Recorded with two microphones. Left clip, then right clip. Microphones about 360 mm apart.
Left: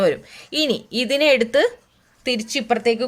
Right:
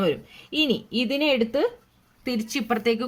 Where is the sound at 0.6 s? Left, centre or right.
Left.